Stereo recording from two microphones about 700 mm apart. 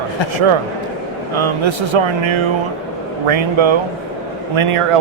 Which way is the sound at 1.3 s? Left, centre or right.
Right.